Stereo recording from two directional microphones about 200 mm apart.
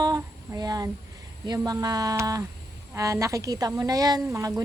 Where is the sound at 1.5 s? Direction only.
15° right (ahead or behind).